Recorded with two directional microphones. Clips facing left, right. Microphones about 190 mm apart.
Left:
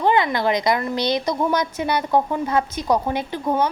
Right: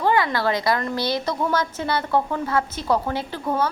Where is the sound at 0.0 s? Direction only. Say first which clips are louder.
Left 2 dB; 20° left (ahead or behind).